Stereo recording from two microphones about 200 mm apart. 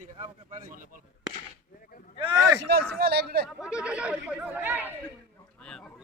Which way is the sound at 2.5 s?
55° right (ahead or behind).